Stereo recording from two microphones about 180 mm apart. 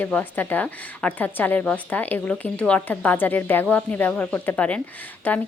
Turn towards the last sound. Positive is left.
turn(degrees=10)  # may be behind; listen again after turning